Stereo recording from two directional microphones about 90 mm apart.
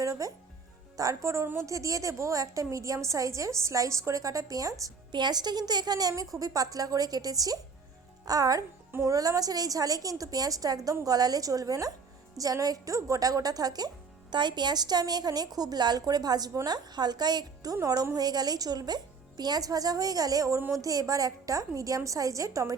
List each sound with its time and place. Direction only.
0.0 s a woman's voice: 40° right (ahead or behind)
5.1 s a woman's voice: 50° right (ahead or behind)
8.9 s a woman's voice: 30° right (ahead or behind)